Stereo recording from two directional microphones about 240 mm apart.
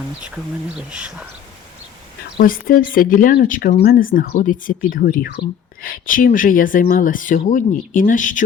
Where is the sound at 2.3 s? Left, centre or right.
Left.